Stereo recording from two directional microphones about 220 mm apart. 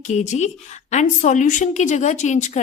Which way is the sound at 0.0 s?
30° left (ahead or behind).